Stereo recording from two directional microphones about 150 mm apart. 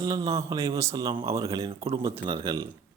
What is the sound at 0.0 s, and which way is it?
A man's voice, 25° right (ahead or behind).